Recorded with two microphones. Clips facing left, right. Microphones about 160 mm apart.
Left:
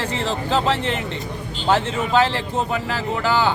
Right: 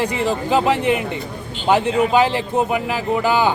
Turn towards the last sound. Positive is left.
turn(degrees=-15)  # may be behind; listen again after turning